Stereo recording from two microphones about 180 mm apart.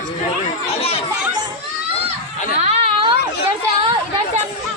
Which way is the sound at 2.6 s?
35° right (ahead or behind).